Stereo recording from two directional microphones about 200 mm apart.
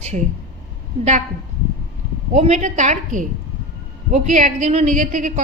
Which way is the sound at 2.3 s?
35° right (ahead or behind).